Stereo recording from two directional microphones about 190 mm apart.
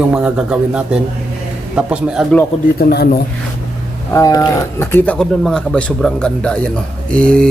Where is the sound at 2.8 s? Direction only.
55° left (ahead or behind).